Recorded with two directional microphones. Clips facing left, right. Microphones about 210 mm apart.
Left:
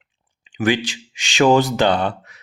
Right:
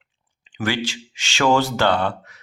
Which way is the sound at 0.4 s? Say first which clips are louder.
Left 5 dB; 15° left (ahead or behind).